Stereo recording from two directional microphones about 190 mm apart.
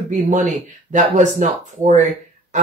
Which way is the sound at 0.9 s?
40° right (ahead or behind).